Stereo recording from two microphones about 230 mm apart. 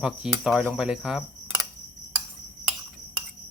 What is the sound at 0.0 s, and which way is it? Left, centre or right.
Cricket, centre.